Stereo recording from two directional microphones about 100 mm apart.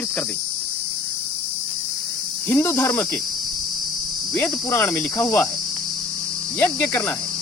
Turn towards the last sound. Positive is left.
turn(degrees=20)  # may be behind; listen again after turning